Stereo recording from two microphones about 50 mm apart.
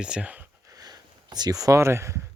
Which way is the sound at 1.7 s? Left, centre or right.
Right.